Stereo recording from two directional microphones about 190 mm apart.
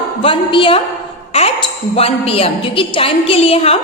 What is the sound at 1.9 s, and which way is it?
Speech, 30° left (ahead or behind).